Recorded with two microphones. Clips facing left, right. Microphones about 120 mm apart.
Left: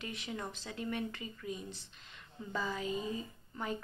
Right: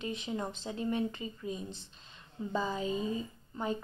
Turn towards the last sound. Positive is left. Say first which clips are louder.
# right 4 dB
turn(degrees=-25)  # may be behind; listen again after turning